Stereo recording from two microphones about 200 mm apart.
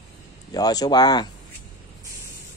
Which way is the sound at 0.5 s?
20° left (ahead or behind).